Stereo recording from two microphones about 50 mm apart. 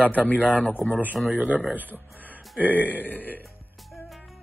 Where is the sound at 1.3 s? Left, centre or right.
Right.